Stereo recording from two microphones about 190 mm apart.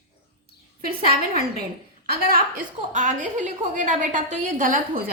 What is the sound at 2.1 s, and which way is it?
A woman's voice, 50° right (ahead or behind).